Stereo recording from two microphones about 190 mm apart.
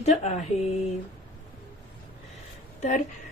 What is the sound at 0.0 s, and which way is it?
Speech, 35° left (ahead or behind).